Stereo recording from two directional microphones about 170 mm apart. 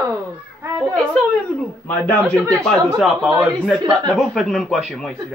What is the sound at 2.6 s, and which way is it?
A man's voice, 5° left (ahead or behind).